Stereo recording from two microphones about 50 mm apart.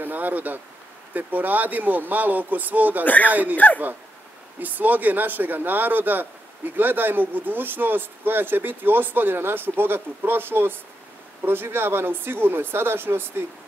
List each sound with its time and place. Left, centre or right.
0.0 s speech: right
3.5 s speech: left
4.6 s speech: right